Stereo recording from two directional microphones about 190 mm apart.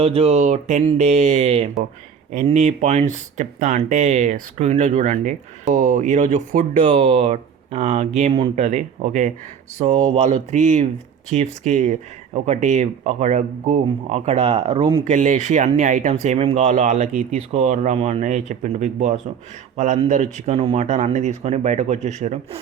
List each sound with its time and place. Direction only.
0.0 s speech: 30° right (ahead or behind)